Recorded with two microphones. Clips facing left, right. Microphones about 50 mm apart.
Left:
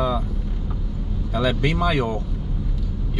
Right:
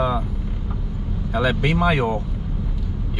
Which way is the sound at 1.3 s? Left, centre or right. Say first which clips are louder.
Right 1 dB; centre.